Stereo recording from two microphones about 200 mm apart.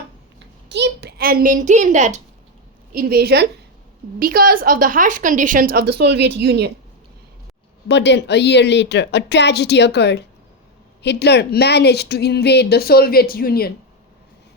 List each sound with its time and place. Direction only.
0.3 s a sound: 60° right (ahead or behind); by 2.2 s 35° right (ahead or behind)
2.9 s a woman's voice: 50° right (ahead or behind)
7.9 s a woman's voice: 60° left (ahead or behind)